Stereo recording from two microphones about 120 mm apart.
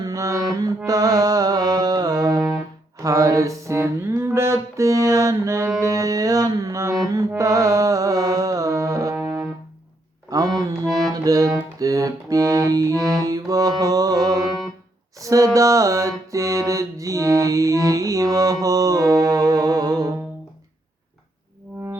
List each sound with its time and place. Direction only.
0.0 s music: 25° right (ahead or behind)
10.2 s music: 30° right (ahead or behind)
15.2 s a sound: 25° right (ahead or behind)
15.5 s music: 25° right (ahead or behind)